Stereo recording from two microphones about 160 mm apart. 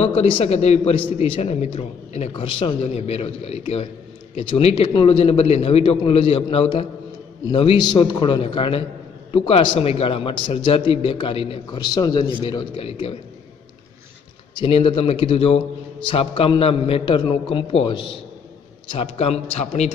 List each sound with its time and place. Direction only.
0.0 s a man's voice: 40° left (ahead or behind)
14.5 s a man's voice: 35° left (ahead or behind)